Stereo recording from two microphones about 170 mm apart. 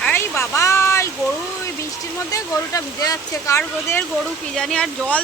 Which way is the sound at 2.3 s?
20° left (ahead or behind).